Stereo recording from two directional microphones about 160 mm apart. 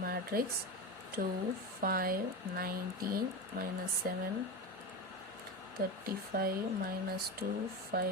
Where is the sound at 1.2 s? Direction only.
60° right (ahead or behind).